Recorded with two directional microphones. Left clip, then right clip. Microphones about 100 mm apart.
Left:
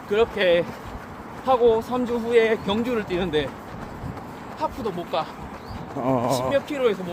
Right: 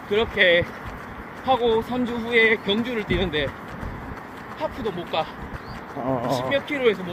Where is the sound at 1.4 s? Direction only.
85° left.